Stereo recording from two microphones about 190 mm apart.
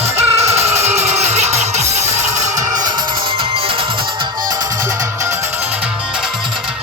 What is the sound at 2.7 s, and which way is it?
Music, 20° right (ahead or behind).